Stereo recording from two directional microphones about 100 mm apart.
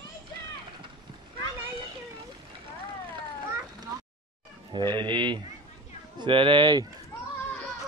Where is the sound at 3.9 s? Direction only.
35° right (ahead or behind).